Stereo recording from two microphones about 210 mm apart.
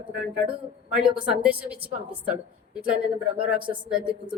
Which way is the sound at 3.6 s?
20° right (ahead or behind).